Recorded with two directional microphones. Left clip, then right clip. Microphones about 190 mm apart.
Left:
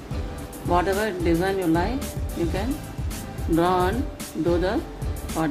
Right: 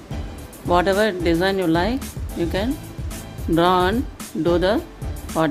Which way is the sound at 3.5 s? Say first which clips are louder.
Right 4 dB; 40° right (ahead or behind).